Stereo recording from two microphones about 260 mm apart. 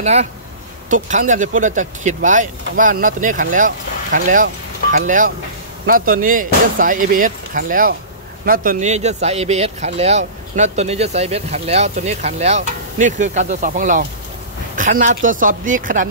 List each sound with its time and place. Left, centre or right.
0.0 s speech: right